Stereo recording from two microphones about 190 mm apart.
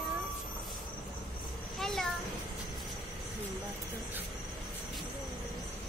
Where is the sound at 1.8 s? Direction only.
Centre (ahead or behind).